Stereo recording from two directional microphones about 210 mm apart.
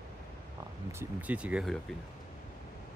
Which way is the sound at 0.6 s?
20° right (ahead or behind).